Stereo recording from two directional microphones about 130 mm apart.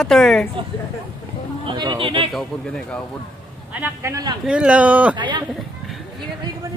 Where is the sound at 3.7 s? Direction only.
15° right (ahead or behind).